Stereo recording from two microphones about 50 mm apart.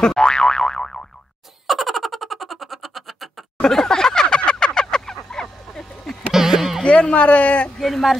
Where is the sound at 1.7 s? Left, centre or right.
Centre.